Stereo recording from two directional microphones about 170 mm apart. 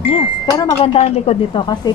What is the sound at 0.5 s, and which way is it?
Speech, 35° left (ahead or behind).